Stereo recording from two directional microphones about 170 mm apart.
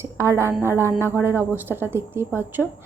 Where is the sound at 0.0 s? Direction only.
15° right (ahead or behind).